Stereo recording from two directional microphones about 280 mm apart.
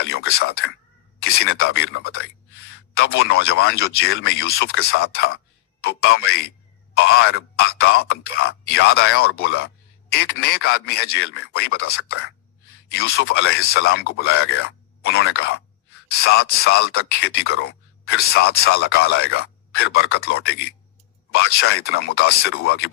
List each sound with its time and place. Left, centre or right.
0.0 s speech: left